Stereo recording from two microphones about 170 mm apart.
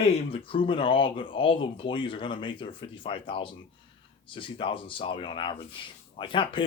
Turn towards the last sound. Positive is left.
turn(degrees=30)  # may be behind; listen again after turning